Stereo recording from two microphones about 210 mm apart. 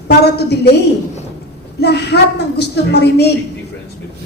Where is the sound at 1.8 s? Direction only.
50° left (ahead or behind).